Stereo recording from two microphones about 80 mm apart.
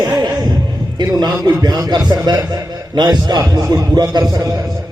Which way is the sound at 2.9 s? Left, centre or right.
Right.